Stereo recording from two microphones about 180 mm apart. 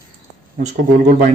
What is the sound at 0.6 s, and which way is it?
Speech, 40° right (ahead or behind).